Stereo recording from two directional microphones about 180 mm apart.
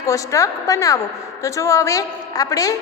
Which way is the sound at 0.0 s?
15° left (ahead or behind).